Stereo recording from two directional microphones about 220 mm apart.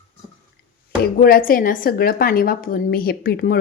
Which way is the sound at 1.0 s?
40° left (ahead or behind).